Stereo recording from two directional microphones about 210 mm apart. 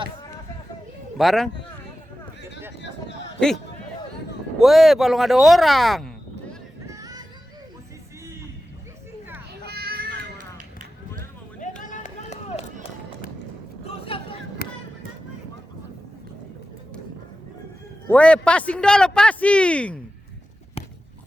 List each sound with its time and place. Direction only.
1.2 s a man's voice: centre (ahead or behind)
4.6 s a man's voice: centre (ahead or behind)
6.8 s a sound: 15° right (ahead or behind)
9.6 s children playing: 50° right (ahead or behind)
11.6 s run: 40° left (ahead or behind)
13.8 s a sound: 25° left (ahead or behind)
14.6 s music: 45° left (ahead or behind)
18.1 s a man's voice: 5° left (ahead or behind)